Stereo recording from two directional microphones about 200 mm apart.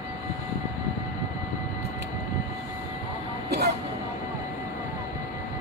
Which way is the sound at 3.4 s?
55° right (ahead or behind).